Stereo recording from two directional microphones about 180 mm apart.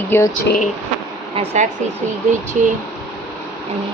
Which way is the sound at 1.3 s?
40° right (ahead or behind).